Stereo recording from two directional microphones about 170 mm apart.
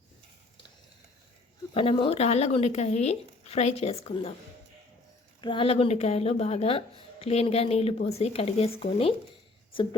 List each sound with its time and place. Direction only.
1.7 s speech: 30° left (ahead or behind)
5.4 s speech: 30° left (ahead or behind)